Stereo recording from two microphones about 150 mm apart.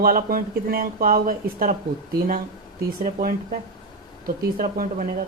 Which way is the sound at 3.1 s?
70° right (ahead or behind).